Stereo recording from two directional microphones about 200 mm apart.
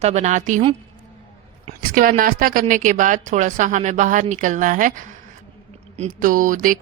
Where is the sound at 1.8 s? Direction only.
45° right (ahead or behind).